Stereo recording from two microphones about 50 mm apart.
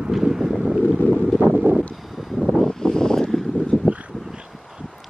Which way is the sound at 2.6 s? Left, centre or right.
Centre.